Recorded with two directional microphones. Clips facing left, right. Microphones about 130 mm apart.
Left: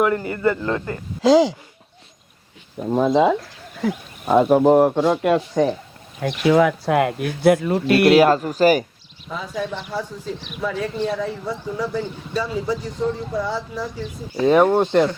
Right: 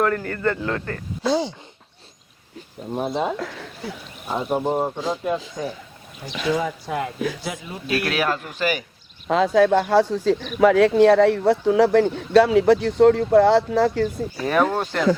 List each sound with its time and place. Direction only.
0.0 s a man's voice: 15° left (ahead or behind)
1.2 s speech: 90° left
2.9 s speech: 90° left
3.3 s speech: 90° right
3.8 s speech: 80° left
6.2 s speech: 90° left; by 7.9 s 65° left (ahead or behind)
8.1 s speech: 35° left (ahead or behind)
9.3 s speech: 90° right
14.3 s speech: 20° left (ahead or behind)